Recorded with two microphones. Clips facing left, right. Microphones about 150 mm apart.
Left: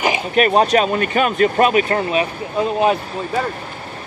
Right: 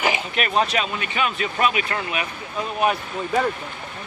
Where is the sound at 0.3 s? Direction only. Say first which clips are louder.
Left 8 dB; 40° left (ahead or behind).